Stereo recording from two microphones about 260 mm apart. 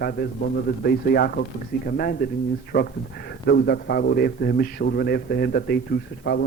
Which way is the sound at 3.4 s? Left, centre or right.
Left.